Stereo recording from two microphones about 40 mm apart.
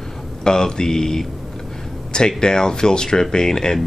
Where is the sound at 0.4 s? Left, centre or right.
Centre.